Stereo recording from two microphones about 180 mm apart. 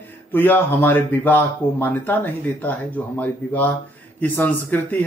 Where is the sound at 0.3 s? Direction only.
10° left (ahead or behind).